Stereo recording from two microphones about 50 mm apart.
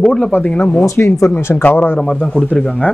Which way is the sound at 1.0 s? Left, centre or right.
Left.